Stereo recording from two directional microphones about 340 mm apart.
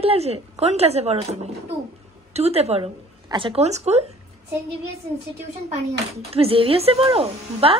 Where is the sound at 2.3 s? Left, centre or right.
Centre.